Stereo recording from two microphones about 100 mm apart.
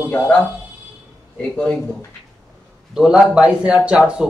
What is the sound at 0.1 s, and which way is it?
Speech, 20° left (ahead or behind).